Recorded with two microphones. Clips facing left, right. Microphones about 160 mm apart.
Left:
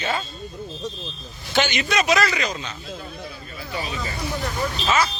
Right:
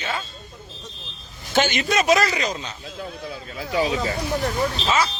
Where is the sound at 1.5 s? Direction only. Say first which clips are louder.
Right 1 dB; 45° right (ahead or behind).